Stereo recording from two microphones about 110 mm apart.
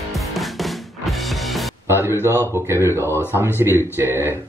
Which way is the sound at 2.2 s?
25° right (ahead or behind).